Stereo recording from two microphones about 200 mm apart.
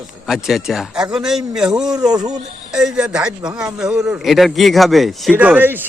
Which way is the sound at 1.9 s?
20° right (ahead or behind).